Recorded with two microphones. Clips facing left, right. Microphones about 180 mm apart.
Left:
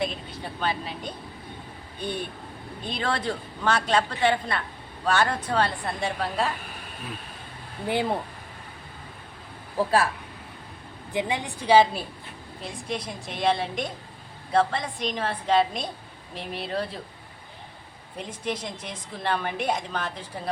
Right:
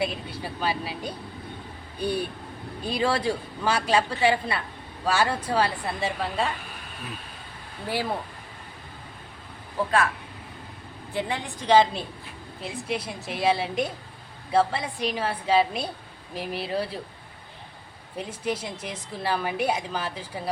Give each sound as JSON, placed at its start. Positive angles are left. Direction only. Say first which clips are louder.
{"t": 0.0, "sound": "a woman's voice", "louder": "right 1 dB", "side_deg": -10}
{"t": 11.1, "sound": "a woman's voice", "louder": "left 2 dB", "side_deg": 15}
{"t": 12.6, "sound": "a woman's voice", "louder": "right 2 dB", "side_deg": -5}
{"t": 18.2, "sound": "a woman's voice", "louder": "right 2 dB", "side_deg": -10}